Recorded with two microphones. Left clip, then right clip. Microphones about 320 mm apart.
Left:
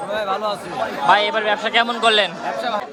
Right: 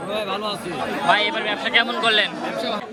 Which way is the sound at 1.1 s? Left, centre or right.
Centre.